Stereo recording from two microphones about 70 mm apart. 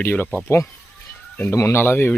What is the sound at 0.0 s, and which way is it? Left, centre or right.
Speech, left.